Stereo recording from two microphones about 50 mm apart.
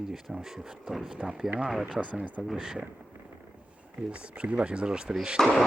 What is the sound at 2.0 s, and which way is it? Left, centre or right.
Speech, right.